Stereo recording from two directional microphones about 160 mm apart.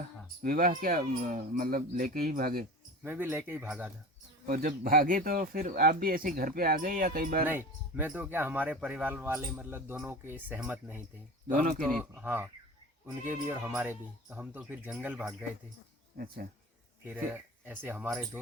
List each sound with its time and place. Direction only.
0.4 s speech: 65° right (ahead or behind)
3.0 s speech: 15° right (ahead or behind)
4.4 s speech: 65° right (ahead or behind)
7.4 s speech: 10° right (ahead or behind)
11.4 s speech: 55° right (ahead or behind)
11.8 s speech: 5° left (ahead or behind)
12.1 s speech: 10° right (ahead or behind)
16.1 s speech: 65° right (ahead or behind)
17.1 s speech: 10° right (ahead or behind)